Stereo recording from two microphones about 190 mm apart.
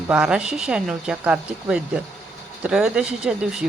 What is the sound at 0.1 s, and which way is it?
Speech, 5° right (ahead or behind).